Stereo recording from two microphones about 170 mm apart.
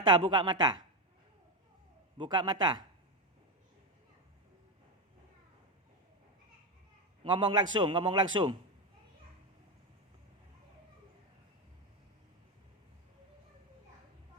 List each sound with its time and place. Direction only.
0.0 s a man's voice: 25° right (ahead or behind)
2.1 s a man's voice: 30° right (ahead or behind)
7.3 s a man's voice: 25° right (ahead or behind)